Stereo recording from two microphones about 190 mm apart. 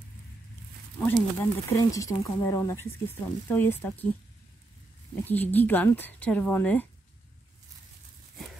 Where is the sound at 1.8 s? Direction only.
15° left (ahead or behind).